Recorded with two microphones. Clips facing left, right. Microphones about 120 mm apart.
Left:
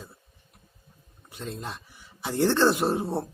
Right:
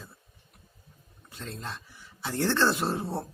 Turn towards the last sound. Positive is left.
turn(degrees=15)  # may be behind; listen again after turning